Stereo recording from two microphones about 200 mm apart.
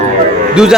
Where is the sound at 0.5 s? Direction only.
5° right (ahead or behind).